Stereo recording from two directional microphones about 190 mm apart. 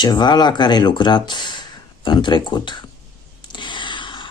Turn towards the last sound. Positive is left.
turn(degrees=25)  # may be behind; listen again after turning